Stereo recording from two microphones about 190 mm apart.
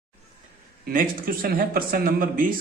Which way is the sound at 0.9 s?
50° right (ahead or behind).